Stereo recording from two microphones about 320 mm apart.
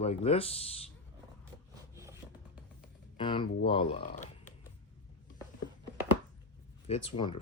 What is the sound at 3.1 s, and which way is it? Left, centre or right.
Speech, centre.